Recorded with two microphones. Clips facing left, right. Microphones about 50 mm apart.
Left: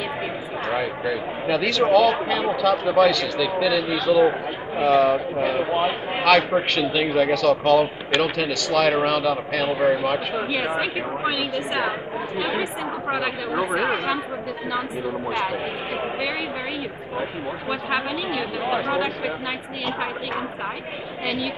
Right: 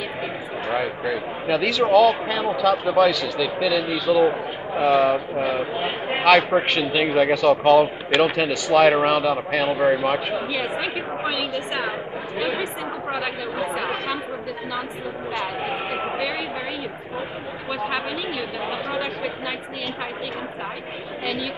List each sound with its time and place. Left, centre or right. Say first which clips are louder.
0.7 s a man's voice: even; centre
10.5 s a man's voice: left 1 dB; centre
17.6 s a man's voice: even; centre